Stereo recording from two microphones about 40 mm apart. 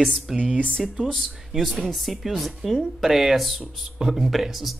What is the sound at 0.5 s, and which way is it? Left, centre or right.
Speech, left.